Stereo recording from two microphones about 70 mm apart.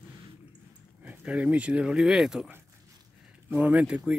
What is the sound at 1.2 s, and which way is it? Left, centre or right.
Speech, centre.